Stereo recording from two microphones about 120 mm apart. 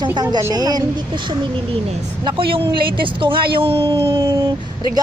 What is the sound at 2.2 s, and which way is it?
Speech, 45° right (ahead or behind).